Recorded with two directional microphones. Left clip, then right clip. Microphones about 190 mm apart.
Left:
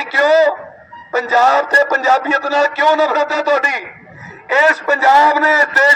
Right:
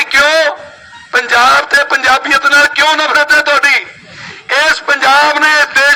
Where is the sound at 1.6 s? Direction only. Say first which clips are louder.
Right 2 dB; 30° left (ahead or behind).